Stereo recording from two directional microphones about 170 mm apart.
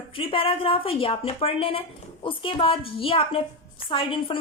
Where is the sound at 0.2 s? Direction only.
30° left (ahead or behind).